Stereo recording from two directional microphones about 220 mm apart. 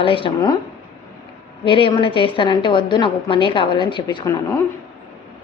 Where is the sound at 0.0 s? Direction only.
25° left (ahead or behind).